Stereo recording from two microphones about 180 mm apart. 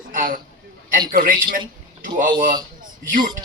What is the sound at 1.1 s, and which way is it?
A man's voice, 50° right (ahead or behind).